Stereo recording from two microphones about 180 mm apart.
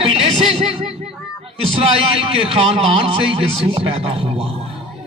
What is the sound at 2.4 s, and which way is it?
A man's voice, 30° right (ahead or behind).